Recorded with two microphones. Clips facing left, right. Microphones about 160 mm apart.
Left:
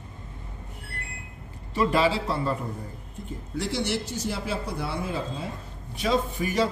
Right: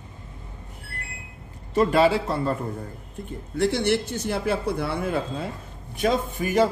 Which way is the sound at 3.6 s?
55° right (ahead or behind).